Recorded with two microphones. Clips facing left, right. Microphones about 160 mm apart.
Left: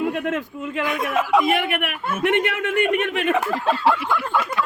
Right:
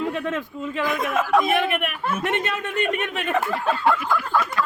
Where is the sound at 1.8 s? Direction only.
65° left (ahead or behind).